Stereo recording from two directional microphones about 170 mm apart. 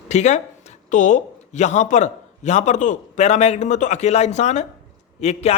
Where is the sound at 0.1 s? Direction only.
45° left (ahead or behind).